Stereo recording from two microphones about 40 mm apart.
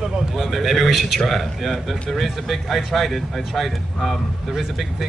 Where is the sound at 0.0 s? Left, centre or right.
Centre.